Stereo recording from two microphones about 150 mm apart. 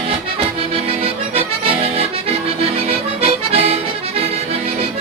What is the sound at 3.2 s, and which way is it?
Music, 40° right (ahead or behind).